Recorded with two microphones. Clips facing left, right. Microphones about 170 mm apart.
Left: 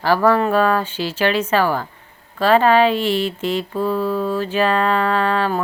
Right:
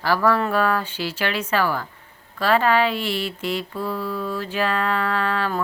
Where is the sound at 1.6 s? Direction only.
40° left (ahead or behind).